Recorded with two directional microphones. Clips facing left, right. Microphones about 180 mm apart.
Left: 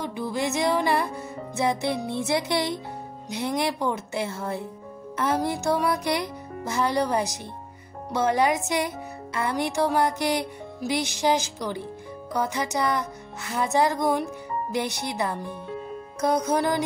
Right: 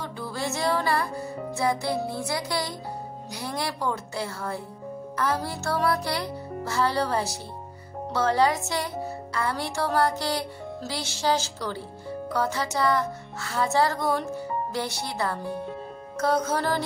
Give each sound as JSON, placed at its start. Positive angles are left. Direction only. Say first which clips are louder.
{"t": 0.0, "sound": "music", "louder": "left 4 dB", "side_deg": 20}